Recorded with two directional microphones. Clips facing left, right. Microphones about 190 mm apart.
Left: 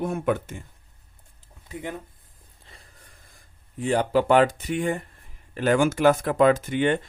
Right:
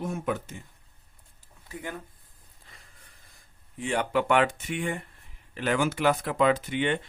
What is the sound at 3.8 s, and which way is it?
Speech, 35° left (ahead or behind).